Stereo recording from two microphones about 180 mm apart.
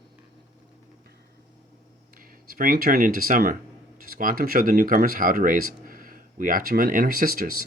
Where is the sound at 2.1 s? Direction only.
50° right (ahead or behind).